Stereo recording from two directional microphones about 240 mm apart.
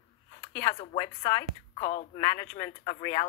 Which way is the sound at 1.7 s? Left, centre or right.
Left.